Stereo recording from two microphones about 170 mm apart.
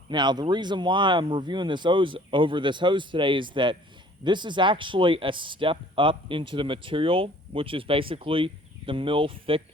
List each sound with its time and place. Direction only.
0.1 s speech: 25° right (ahead or behind)